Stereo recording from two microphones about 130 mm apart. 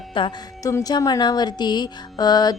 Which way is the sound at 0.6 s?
25° left (ahead or behind).